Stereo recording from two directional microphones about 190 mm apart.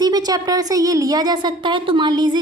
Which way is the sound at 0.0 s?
20° right (ahead or behind).